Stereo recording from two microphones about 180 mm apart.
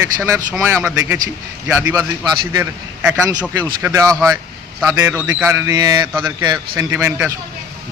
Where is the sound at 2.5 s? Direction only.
15° right (ahead or behind).